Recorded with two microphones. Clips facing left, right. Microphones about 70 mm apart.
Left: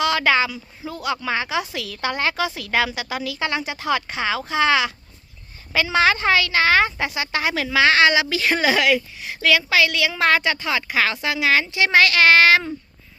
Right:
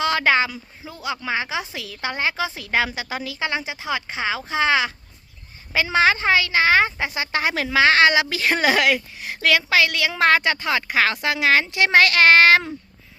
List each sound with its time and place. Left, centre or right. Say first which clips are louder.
0.0 s a man's voice: even; right
1.0 s a woman's voice: left 1 dB; centre; by 12.7 s right